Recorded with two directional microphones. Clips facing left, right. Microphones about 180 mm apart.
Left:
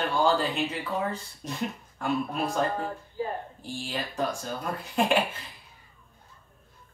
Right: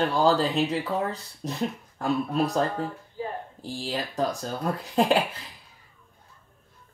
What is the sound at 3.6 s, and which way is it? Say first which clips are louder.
Speech: right 5 dB; 35° right (ahead or behind).